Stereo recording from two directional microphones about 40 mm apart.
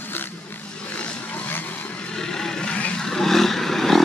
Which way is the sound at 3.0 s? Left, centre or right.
Centre.